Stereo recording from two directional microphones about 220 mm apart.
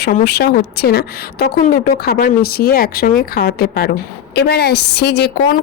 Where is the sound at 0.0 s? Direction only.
40° left (ahead or behind).